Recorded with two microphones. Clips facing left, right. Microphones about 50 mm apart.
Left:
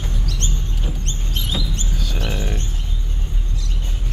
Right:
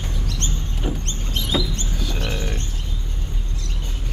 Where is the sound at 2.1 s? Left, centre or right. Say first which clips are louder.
Left 1 dB; centre.